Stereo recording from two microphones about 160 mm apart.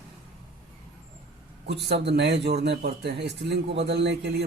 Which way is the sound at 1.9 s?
90° right.